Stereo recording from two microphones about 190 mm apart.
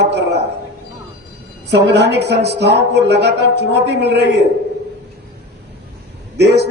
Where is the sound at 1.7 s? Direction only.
65° right (ahead or behind).